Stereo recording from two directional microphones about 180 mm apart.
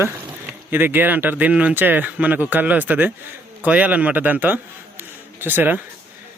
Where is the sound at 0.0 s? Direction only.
10° right (ahead or behind).